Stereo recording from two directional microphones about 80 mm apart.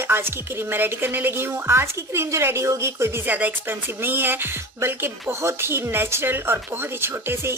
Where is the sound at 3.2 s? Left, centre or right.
Right.